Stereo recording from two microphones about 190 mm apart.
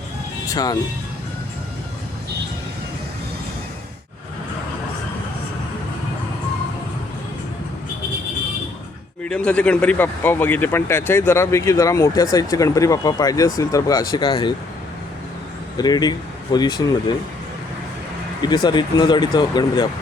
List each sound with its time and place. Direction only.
0.4 s speech: 20° left (ahead or behind)
9.2 s speech: 5° left (ahead or behind); by 14.5 s 20° left (ahead or behind)
15.8 s speech: 20° left (ahead or behind)
18.4 s speech: 25° left (ahead or behind)